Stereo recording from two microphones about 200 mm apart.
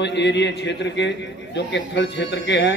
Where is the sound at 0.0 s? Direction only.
60° left (ahead or behind).